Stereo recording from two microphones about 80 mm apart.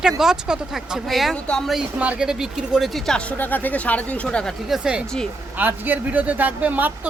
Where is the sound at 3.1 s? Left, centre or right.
Centre.